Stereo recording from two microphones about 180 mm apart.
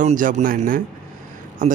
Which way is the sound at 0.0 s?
45° right (ahead or behind).